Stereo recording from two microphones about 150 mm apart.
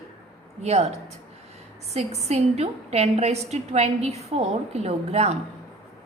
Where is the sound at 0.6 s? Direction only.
45° right (ahead or behind).